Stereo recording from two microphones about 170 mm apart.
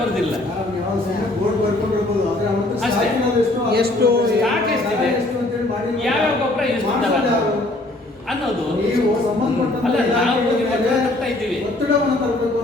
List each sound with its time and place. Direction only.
3.7 s a man's voice: 65° right (ahead or behind)